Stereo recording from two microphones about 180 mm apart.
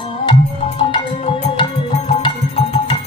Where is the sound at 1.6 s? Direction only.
30° left (ahead or behind).